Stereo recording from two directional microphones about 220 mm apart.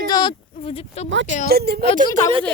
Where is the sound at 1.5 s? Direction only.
45° right (ahead or behind).